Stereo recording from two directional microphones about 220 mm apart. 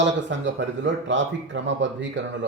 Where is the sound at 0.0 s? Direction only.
55° right (ahead or behind).